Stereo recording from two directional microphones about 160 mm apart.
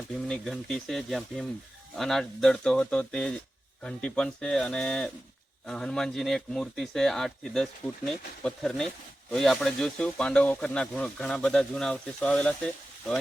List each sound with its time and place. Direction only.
0.3 s speech: centre (ahead or behind)